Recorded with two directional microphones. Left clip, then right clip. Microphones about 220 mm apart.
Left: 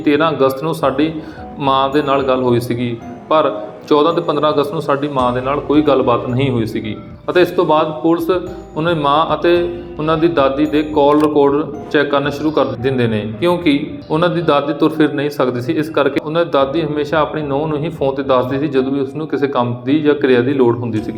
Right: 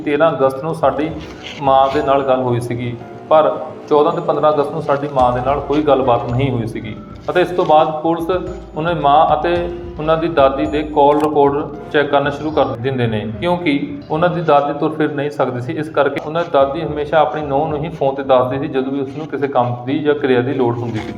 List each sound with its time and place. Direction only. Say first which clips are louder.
0.0 s a man's voice: even; 50° left (ahead or behind)